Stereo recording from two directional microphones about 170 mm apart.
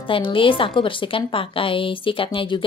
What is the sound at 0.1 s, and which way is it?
A woman's voice, 30° left (ahead or behind).